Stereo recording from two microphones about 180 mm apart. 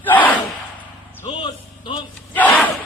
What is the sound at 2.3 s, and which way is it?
Battle cry, 10° left (ahead or behind).